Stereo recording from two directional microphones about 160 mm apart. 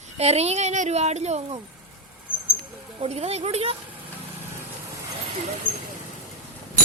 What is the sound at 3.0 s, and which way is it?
Speech, 40° right (ahead or behind).